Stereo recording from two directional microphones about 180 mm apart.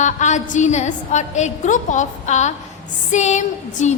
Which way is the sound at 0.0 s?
40° left (ahead or behind).